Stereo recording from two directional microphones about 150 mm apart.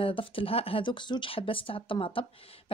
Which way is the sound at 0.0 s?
35° left (ahead or behind).